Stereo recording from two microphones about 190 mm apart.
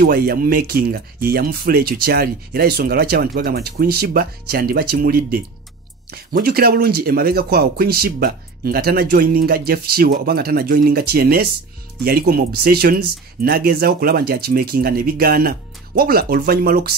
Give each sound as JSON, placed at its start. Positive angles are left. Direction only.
{"t": 0.0, "sound": "speech", "side_deg": -55}